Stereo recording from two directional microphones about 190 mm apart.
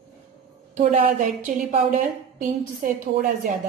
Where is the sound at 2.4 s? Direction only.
45° right (ahead or behind).